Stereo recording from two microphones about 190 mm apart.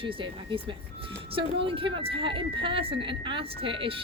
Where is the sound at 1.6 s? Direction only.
25° right (ahead or behind).